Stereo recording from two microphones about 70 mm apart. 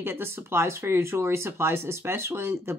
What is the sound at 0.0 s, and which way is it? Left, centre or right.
Speech, right.